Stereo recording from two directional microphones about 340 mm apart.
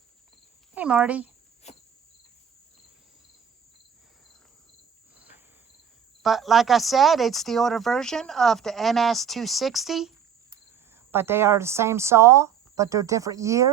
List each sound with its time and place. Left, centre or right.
0.7 s speech: centre
1.7 s cricket: centre
6.2 s speech: centre
11.1 s speech: centre